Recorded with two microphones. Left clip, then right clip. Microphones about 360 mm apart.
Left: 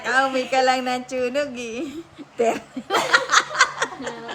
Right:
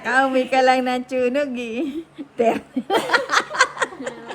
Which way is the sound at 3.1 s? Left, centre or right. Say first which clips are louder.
Left 4 dB; centre.